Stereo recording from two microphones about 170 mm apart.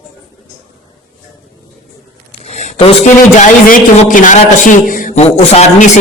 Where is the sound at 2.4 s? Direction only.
40° left (ahead or behind).